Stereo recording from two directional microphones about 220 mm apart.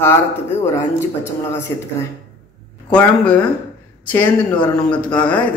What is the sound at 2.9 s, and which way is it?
Speech, 5° left (ahead or behind).